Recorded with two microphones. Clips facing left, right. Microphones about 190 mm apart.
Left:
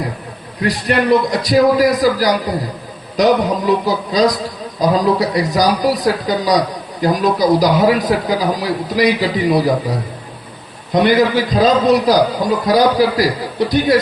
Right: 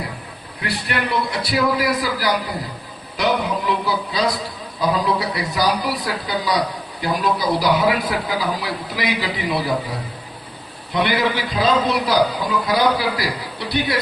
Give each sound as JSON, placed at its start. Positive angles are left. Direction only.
{"t": 0.6, "sound": "a man's voice", "side_deg": 40}
{"t": 10.9, "sound": "a man's voice", "side_deg": 45}